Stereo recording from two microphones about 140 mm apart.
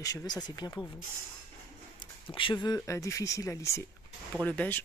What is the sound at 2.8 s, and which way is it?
Speech, 20° left (ahead or behind).